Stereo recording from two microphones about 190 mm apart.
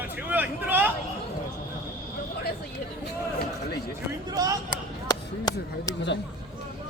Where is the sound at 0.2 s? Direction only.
10° right (ahead or behind).